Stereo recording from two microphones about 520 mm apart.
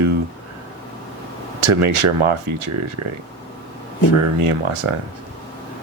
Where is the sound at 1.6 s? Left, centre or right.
Right.